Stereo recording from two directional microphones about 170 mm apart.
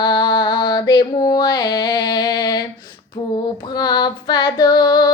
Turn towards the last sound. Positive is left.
turn(degrees=25)  # may be behind; listen again after turning